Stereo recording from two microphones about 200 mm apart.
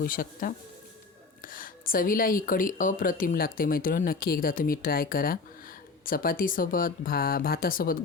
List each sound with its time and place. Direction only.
0.0 s speech: 45° left (ahead or behind)